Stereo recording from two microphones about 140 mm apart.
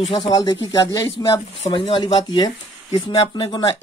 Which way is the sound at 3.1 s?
45° left (ahead or behind).